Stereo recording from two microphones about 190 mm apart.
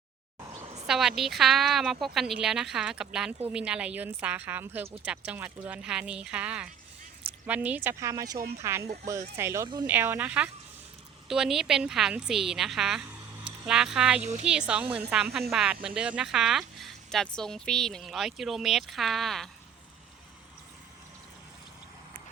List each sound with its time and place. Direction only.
0.6 s a sound: 35° right (ahead or behind)
0.9 s speech: centre (ahead or behind)
14.2 s speech: 35° right (ahead or behind)
14.7 s speech: 5° right (ahead or behind)